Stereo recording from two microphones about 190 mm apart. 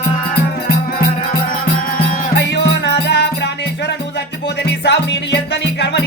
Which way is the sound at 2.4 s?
65° left (ahead or behind).